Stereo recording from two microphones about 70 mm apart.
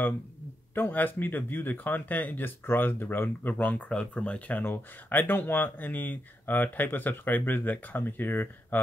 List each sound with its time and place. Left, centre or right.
0.7 s speech: left